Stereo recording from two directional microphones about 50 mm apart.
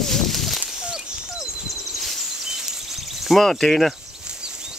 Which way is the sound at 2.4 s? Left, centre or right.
Centre.